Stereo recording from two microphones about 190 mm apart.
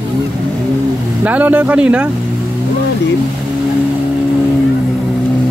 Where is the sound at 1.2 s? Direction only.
10° right (ahead or behind).